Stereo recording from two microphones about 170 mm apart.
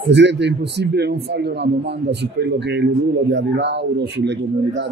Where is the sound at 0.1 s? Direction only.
90° right.